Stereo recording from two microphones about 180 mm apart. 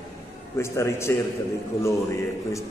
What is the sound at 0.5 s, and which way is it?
Speech, 15° left (ahead or behind).